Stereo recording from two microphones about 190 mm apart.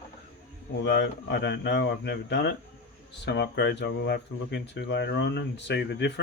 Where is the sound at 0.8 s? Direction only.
65° left (ahead or behind).